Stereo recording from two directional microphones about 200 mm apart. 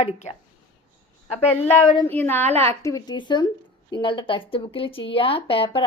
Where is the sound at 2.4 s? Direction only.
30° right (ahead or behind).